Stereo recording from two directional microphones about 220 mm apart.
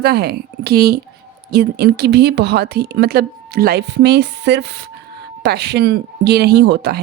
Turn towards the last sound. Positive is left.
turn(degrees=-50)  # may be behind; listen again after turning